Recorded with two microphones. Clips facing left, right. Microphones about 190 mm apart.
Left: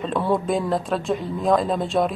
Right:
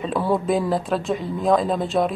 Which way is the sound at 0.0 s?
5° right (ahead or behind).